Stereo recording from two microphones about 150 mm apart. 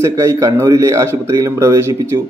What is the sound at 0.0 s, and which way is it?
A man's voice, 20° right (ahead or behind).